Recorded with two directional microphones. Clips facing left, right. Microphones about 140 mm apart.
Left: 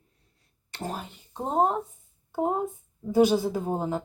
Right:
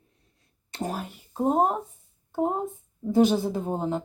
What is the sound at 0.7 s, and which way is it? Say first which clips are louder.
Speech: right 3 dB; 15° right (ahead or behind).